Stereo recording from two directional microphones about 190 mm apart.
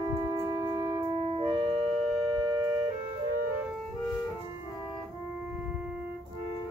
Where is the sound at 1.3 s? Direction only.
30° right (ahead or behind).